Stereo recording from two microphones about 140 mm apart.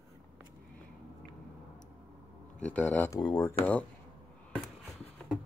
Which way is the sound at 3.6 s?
10° left (ahead or behind).